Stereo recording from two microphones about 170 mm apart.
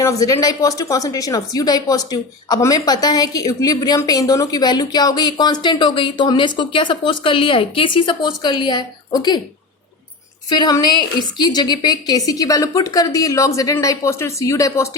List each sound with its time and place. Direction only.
0.0 s a woman's voice: 20° left (ahead or behind)
10.5 s a woman's voice: 25° left (ahead or behind)